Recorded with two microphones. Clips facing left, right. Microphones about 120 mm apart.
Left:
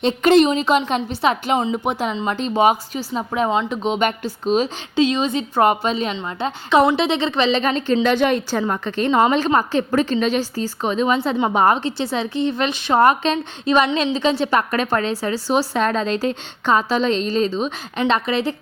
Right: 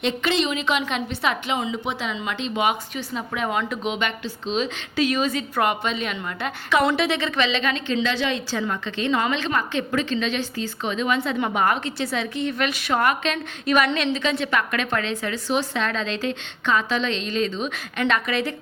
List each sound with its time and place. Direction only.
0.0 s a woman's voice: 45° left (ahead or behind)
1.7 s a woman's voice: 45° left (ahead or behind)
4.9 s a woman's voice: 25° left (ahead or behind)